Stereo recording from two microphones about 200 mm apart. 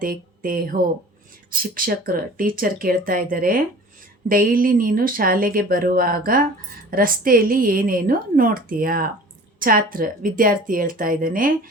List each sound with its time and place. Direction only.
0.0 s speech: 45° right (ahead or behind)